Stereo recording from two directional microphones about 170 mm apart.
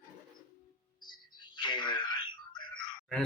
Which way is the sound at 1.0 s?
25° left (ahead or behind).